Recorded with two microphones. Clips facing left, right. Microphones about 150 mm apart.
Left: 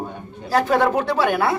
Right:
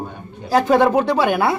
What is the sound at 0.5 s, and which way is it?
A man's voice, 15° right (ahead or behind).